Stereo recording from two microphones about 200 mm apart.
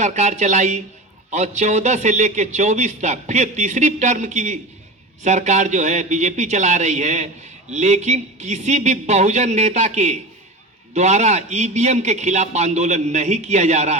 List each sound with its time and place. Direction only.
0.0 s speech: 35° right (ahead or behind)